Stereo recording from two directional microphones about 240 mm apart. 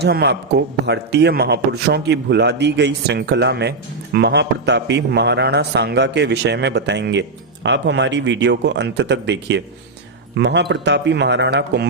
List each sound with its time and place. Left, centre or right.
0.0 s a man's voice: right